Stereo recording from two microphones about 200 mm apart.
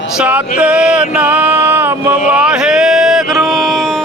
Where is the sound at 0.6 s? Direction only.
5° right (ahead or behind).